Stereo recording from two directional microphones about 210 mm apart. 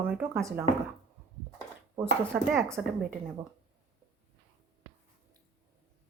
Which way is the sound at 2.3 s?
5° right (ahead or behind).